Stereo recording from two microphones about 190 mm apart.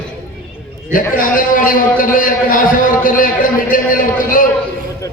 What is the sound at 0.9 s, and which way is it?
A man's voice, 45° left (ahead or behind).